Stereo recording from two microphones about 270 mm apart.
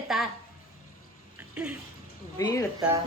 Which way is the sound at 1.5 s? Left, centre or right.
Centre.